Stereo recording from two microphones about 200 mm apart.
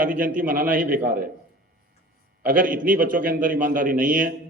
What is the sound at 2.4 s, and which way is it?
A man's voice, 45° right (ahead or behind).